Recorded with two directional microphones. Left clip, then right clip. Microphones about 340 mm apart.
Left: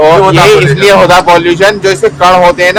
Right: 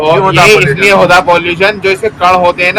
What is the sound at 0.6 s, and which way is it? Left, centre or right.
A man's voice, left.